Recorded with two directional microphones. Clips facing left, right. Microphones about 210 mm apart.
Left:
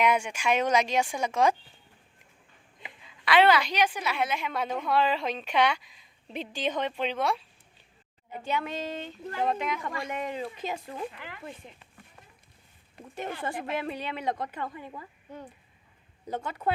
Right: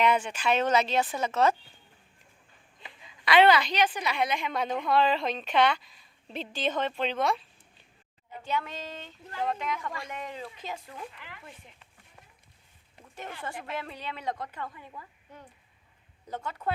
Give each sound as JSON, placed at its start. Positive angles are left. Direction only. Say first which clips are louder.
{"t": 0.0, "sound": "a woman's voice", "louder": "even", "side_deg": 10}
{"t": 3.2, "sound": "a woman's voice", "louder": "right 1 dB", "side_deg": 5}
{"t": 11.1, "sound": "speech", "louder": "left 5 dB", "side_deg": 55}
{"t": 11.6, "sound": "speech", "louder": "left 7 dB", "side_deg": 30}
{"t": 13.5, "sound": "speech", "louder": "left 5 dB", "side_deg": 45}
{"t": 13.7, "sound": "a woman's voice", "louder": "left 5 dB", "side_deg": 15}
{"t": 16.3, "sound": "a woman's voice", "louder": "left 3 dB", "side_deg": 15}